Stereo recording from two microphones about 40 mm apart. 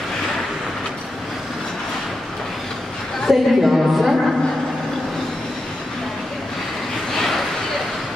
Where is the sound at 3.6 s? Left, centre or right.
Centre.